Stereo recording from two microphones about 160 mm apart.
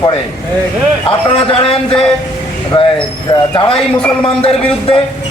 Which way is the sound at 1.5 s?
35° left (ahead or behind).